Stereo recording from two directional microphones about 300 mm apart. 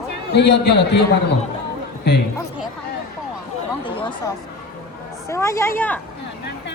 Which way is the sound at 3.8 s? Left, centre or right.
Centre.